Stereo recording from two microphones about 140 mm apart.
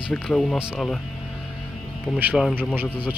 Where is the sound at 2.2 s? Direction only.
10° right (ahead or behind).